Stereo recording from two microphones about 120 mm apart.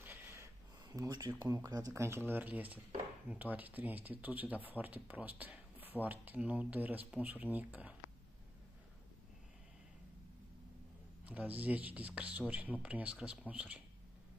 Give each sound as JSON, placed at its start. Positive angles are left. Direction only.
{"t": 0.0, "sound": "a sound", "side_deg": -20}
{"t": 1.4, "sound": "speech", "side_deg": -30}
{"t": 11.2, "sound": "speech", "side_deg": -10}